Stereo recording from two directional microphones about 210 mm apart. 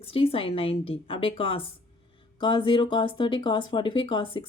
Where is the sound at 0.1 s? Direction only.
25° left (ahead or behind).